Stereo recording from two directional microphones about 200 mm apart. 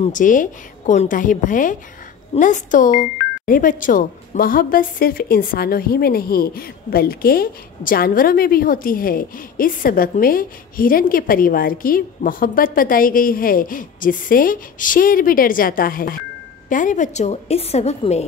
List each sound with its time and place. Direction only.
0.0 s a woman's voice: 40° left (ahead or behind)